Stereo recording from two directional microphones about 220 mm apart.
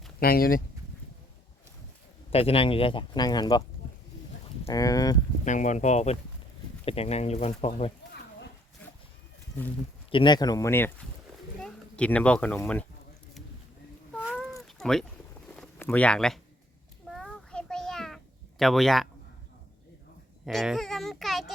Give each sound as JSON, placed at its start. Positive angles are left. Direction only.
{"t": 0.2, "sound": "speech", "side_deg": 40}
{"t": 2.3, "sound": "speech", "side_deg": 25}
{"t": 4.6, "sound": "speech", "side_deg": 15}
{"t": 5.5, "sound": "speech", "side_deg": 35}
{"t": 10.1, "sound": "speech", "side_deg": 20}
{"t": 14.2, "sound": "cat", "side_deg": 0}
{"t": 15.4, "sound": "a sound", "side_deg": 5}
{"t": 18.6, "sound": "speech", "side_deg": 0}
{"t": 20.4, "sound": "a child's voice", "side_deg": 0}